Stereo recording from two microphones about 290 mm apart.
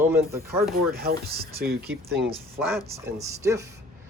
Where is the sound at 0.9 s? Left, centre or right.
Right.